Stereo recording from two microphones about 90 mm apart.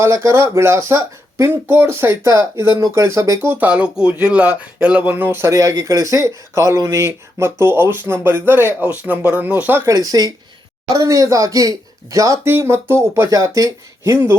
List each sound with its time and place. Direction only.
0.0 s speech: 30° right (ahead or behind)
1.6 s speech: 20° right (ahead or behind)
9.9 s speech: 45° right (ahead or behind)
12.5 s speech: 30° right (ahead or behind)